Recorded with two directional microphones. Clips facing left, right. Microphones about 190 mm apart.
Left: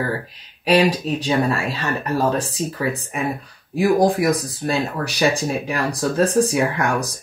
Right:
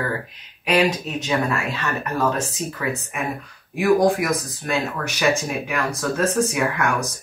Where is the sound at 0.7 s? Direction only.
35° left (ahead or behind).